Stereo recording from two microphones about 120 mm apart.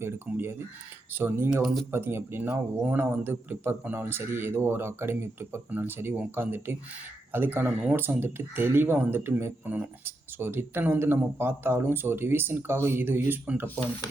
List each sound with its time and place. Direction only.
0.0 s speech: 20° right (ahead or behind)
1.6 s speech: centre (ahead or behind)
1.9 s speech: 20° right (ahead or behind)